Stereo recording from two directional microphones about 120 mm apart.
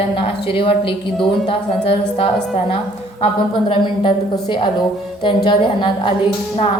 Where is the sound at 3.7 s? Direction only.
45° left (ahead or behind).